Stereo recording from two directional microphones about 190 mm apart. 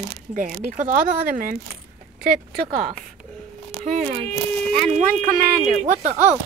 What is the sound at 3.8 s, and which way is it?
Speech, 35° right (ahead or behind).